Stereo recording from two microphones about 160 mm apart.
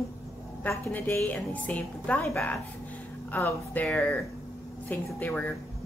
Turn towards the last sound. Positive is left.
turn(degrees=10)  # may be behind; listen again after turning